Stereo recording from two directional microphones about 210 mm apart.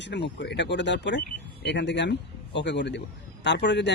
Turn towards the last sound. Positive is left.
turn(degrees=55)  # may be behind; listen again after turning